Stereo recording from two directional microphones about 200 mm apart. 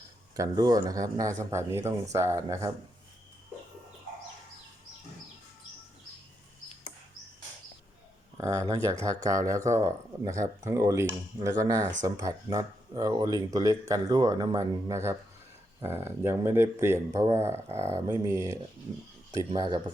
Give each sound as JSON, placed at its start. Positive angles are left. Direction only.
{"t": 0.3, "sound": "speech", "side_deg": -20}
{"t": 8.4, "sound": "speech", "side_deg": -15}
{"t": 19.5, "sound": "speech", "side_deg": -20}